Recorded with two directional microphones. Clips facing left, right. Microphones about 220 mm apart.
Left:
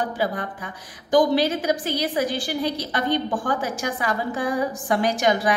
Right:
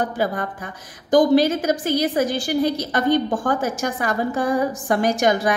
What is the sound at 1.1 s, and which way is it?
A woman's voice, 45° right (ahead or behind).